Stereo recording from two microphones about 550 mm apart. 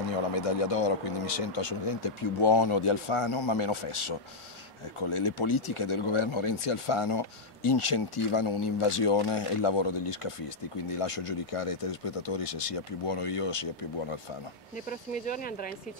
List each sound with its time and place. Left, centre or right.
0.4 s speech: left
14.9 s speech: centre